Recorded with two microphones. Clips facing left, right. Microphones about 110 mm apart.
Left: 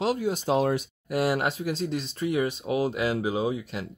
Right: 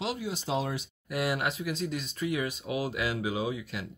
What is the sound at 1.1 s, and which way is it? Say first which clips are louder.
Speech: left 5 dB; 35° left (ahead or behind).